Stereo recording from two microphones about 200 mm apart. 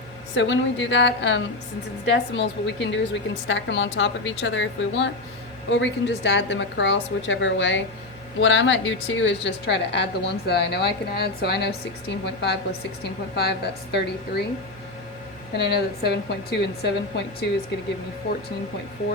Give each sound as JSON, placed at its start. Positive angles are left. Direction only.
{"t": 0.3, "sound": "speech", "side_deg": 65}
{"t": 15.5, "sound": "speech", "side_deg": 55}